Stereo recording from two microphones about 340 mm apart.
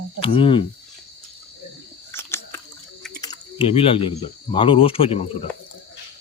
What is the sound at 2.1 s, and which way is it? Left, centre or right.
Chewing, centre.